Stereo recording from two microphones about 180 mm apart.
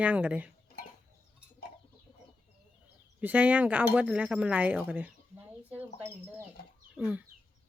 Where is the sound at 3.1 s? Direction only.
10° right (ahead or behind).